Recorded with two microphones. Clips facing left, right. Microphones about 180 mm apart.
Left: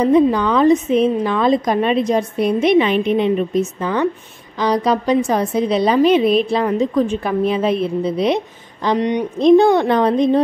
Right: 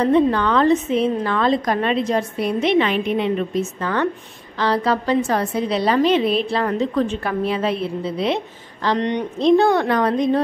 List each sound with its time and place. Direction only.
0.0 s a woman's voice: 10° left (ahead or behind)